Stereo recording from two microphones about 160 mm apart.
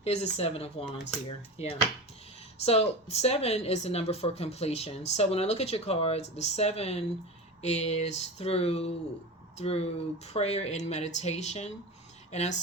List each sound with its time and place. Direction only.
0.0 s speech: 40° left (ahead or behind)